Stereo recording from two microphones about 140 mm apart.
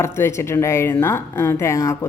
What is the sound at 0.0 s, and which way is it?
Speech, 20° left (ahead or behind).